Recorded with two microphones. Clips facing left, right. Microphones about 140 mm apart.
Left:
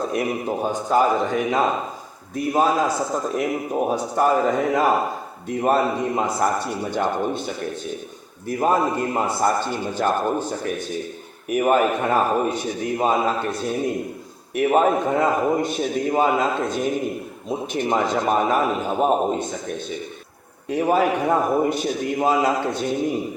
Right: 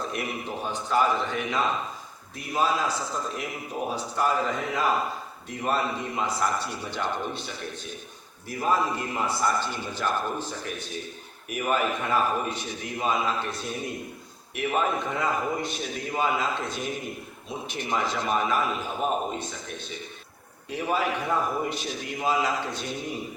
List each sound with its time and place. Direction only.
0.1 s a man's voice: 40° left (ahead or behind)
8.5 s a man's voice: 45° left (ahead or behind)
20.7 s a man's voice: 50° left (ahead or behind)